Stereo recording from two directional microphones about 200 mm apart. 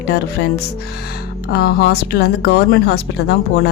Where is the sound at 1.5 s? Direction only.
50° left (ahead or behind).